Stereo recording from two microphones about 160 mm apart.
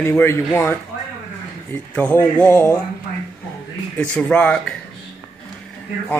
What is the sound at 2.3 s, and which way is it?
Speech, 10° left (ahead or behind).